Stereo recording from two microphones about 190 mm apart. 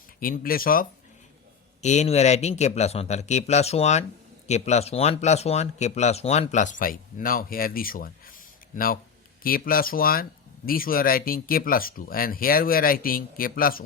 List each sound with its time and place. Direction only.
0.2 s speech: 50° left (ahead or behind)
1.8 s speech: 35° left (ahead or behind)